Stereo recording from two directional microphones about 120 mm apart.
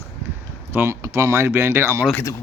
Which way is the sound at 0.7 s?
20° right (ahead or behind).